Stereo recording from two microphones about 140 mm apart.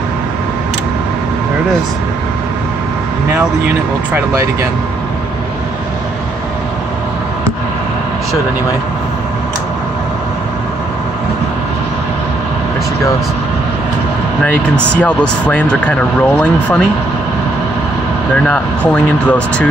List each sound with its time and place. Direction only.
3.6 s speech: 15° right (ahead or behind)
14.4 s speech: 10° left (ahead or behind)
18.4 s speech: 10° left (ahead or behind)